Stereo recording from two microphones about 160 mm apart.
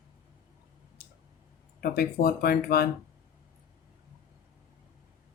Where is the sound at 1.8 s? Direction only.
70° left (ahead or behind).